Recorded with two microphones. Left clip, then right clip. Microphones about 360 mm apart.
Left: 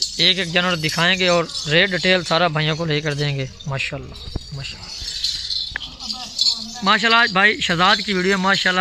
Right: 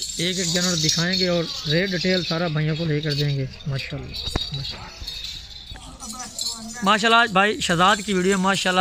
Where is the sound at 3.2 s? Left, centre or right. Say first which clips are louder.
Left 3 dB; left.